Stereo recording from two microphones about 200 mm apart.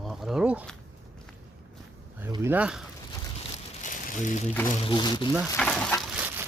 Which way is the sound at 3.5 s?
40° left (ahead or behind).